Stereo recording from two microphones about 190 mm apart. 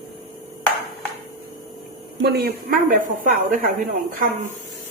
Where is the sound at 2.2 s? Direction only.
60° right (ahead or behind); by 4.2 s 45° right (ahead or behind).